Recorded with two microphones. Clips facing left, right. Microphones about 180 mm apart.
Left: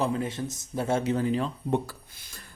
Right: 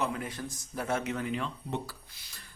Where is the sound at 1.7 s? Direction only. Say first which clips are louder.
Left 8 dB; 50° left (ahead or behind).